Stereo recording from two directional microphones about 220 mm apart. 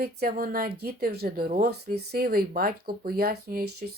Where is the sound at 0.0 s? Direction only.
45° right (ahead or behind).